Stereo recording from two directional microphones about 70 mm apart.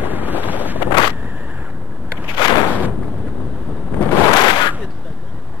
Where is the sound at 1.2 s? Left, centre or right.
Right.